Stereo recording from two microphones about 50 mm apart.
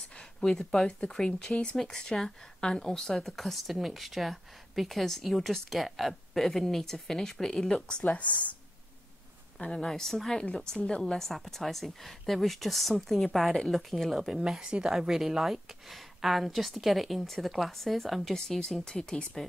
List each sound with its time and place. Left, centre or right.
0.4 s a woman's voice: centre
8.0 s speech: left
9.6 s a woman's voice: centre